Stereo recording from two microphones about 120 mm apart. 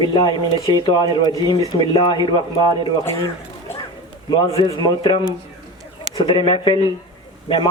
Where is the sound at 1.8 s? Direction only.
45° left (ahead or behind).